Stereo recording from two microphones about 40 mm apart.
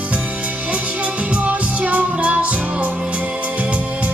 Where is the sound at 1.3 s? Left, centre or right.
Right.